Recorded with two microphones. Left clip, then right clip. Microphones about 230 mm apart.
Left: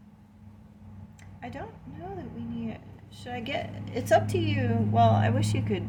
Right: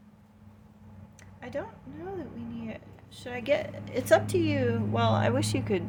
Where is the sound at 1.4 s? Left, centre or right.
Right.